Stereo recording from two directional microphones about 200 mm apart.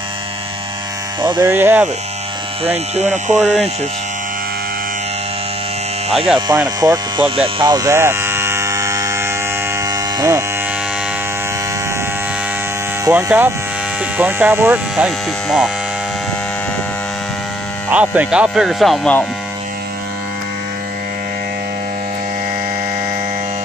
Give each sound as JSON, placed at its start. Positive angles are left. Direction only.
{"t": 1.4, "sound": "hum", "side_deg": -10}
{"t": 3.0, "sound": "speech", "side_deg": -35}
{"t": 6.1, "sound": "speech", "side_deg": 0}
{"t": 6.8, "sound": "electric shaver", "side_deg": -20}
{"t": 9.8, "sound": "hum", "side_deg": -20}
{"t": 13.0, "sound": "hum", "side_deg": -10}
{"t": 17.9, "sound": "speech", "side_deg": -5}